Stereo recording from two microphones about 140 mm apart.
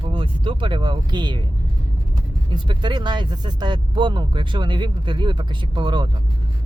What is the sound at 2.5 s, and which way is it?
Speech, 35° right (ahead or behind).